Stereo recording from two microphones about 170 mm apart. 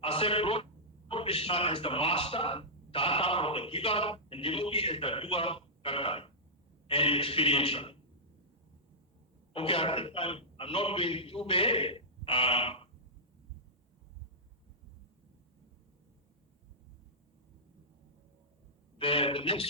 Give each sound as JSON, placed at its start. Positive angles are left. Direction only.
{"t": 0.0, "sound": "a man's voice", "side_deg": 35}
{"t": 9.5, "sound": "a man's voice", "side_deg": 35}
{"t": 18.9, "sound": "a man's voice", "side_deg": 35}